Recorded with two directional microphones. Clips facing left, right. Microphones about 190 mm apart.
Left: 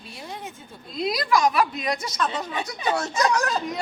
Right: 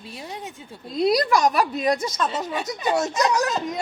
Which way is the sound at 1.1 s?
40° right (ahead or behind).